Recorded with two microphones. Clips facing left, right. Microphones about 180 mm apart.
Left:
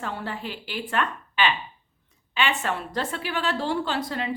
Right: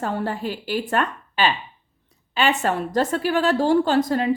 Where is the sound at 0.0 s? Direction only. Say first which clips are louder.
Right 7 dB; 45° right (ahead or behind).